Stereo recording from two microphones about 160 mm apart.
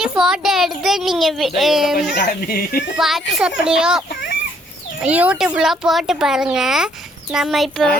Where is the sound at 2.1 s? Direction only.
70° left (ahead or behind).